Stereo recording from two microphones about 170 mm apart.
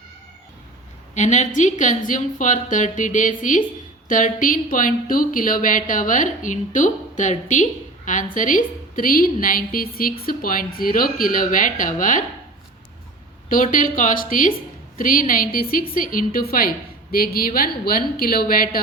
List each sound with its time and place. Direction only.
1.1 s speech: 45° left (ahead or behind)
13.5 s a woman's voice: 55° left (ahead or behind)